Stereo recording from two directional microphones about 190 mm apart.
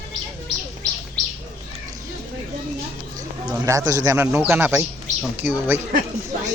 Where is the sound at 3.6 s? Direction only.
20° right (ahead or behind).